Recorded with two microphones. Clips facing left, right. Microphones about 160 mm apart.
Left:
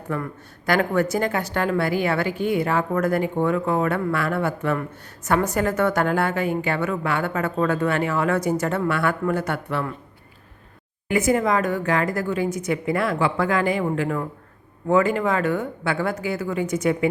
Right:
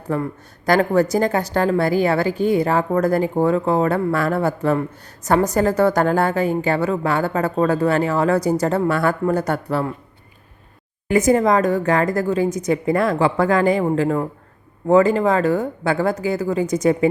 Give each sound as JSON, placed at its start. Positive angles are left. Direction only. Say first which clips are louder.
{"t": 0.1, "sound": "a woman's voice", "louder": "right 5 dB", "side_deg": -35}
{"t": 11.1, "sound": "a woman's voice", "louder": "right 5 dB", "side_deg": -40}